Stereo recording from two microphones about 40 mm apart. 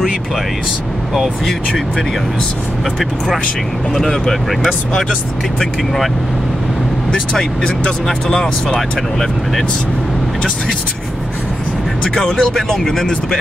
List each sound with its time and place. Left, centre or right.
1.1 s speech: centre
3.9 s speech: centre
8.3 s speech: centre
12.0 s speech: centre